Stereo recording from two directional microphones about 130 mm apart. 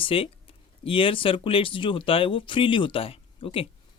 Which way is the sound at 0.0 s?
45° left (ahead or behind).